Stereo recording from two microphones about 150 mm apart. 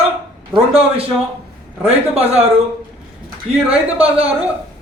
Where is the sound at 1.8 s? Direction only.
40° right (ahead or behind).